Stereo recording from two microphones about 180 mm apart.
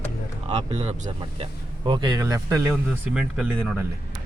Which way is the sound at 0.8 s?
40° right (ahead or behind).